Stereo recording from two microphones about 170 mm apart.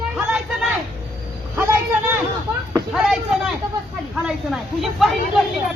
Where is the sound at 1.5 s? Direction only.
15° right (ahead or behind).